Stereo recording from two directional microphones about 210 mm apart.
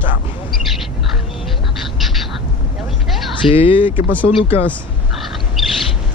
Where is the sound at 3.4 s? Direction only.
25° left (ahead or behind).